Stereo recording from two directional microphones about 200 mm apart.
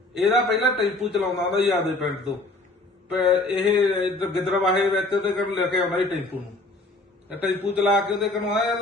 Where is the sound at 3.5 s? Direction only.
25° left (ahead or behind).